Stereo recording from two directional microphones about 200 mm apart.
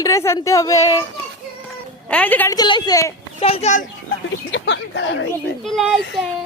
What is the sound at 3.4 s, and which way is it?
Speech, 30° left (ahead or behind).